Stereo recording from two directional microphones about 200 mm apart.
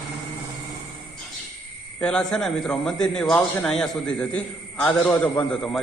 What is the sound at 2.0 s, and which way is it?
A man's voice, 5° left (ahead or behind).